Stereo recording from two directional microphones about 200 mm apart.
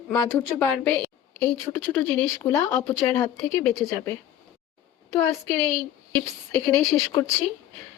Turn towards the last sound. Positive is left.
turn(degrees=20)  # may be behind; listen again after turning